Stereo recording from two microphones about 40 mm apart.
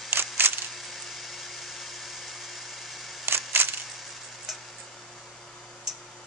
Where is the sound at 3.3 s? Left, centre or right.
Right.